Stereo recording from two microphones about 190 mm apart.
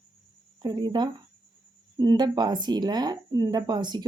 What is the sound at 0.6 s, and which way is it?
Speech, 20° right (ahead or behind).